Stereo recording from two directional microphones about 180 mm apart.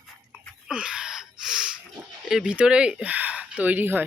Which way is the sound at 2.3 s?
5° right (ahead or behind).